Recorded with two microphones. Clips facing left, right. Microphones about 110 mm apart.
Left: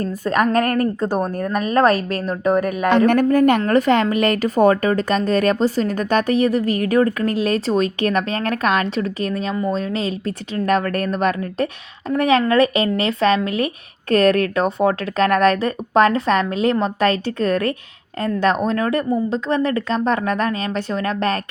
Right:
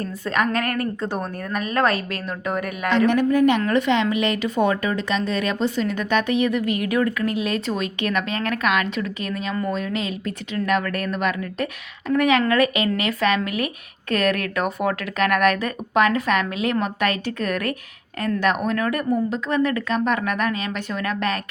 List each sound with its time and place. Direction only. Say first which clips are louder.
0.0 s a woman's voice: left 4 dB; 40° left (ahead or behind)